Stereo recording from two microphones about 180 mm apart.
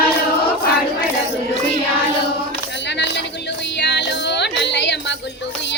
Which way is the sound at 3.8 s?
75° left (ahead or behind).